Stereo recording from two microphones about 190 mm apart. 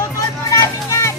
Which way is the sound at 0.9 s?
15° left (ahead or behind).